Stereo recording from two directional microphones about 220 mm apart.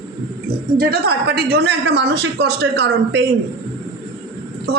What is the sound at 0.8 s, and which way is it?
A woman's voice, 45° right (ahead or behind).